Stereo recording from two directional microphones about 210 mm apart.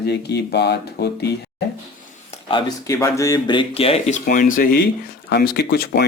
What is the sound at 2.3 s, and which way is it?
Speech, 20° left (ahead or behind).